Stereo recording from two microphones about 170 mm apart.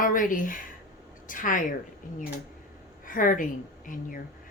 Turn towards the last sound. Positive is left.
turn(degrees=55)  # may be behind; listen again after turning